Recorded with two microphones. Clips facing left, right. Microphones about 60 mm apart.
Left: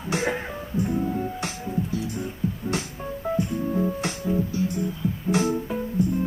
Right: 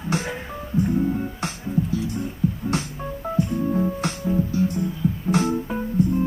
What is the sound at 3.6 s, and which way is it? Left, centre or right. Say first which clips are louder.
Music: right 2 dB; centre.